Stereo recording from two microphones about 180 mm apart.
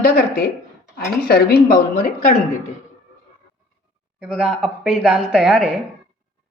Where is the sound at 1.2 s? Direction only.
60° left (ahead or behind).